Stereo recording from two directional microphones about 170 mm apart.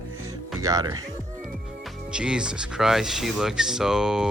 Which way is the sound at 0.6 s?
20° right (ahead or behind).